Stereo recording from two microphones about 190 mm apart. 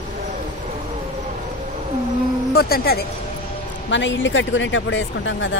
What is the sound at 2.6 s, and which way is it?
Speech, 55° left (ahead or behind).